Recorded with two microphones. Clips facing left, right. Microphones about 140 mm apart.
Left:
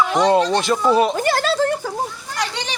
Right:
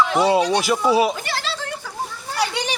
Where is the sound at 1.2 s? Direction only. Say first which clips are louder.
Left 10 dB; 45° left (ahead or behind).